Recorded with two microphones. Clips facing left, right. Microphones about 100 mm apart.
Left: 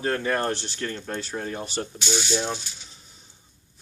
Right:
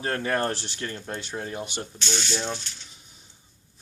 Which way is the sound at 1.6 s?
35° left (ahead or behind).